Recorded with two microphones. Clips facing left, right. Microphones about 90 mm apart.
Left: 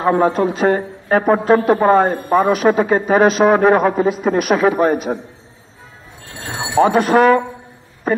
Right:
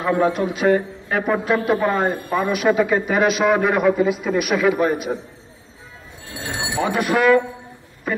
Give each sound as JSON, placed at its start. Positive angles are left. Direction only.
{"t": 0.0, "sound": "a man's voice", "side_deg": 35}
{"t": 6.5, "sound": "speech", "side_deg": 45}